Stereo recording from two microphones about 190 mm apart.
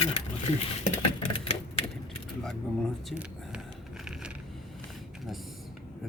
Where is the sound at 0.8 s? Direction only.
30° left (ahead or behind).